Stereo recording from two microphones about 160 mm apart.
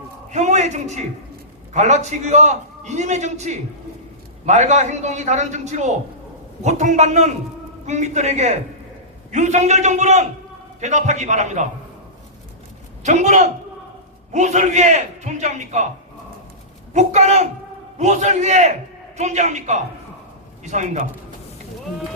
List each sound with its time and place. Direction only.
0.3 s a man's voice: 45° right (ahead or behind)
13.0 s a man's voice: 45° right (ahead or behind)
16.9 s a man's voice: 45° right (ahead or behind)